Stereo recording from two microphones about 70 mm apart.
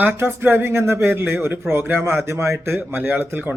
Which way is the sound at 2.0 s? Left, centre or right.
Right.